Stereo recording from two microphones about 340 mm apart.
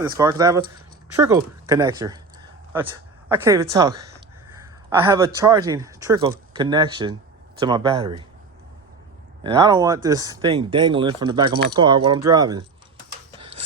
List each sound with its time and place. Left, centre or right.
0.0 s speech: centre
3.2 s speech: centre
9.4 s speech: centre
13.4 s a sound: centre